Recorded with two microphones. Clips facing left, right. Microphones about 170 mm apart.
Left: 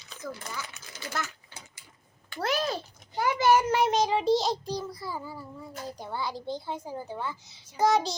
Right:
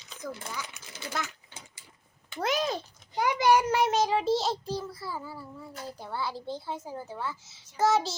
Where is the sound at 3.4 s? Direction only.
15° right (ahead or behind).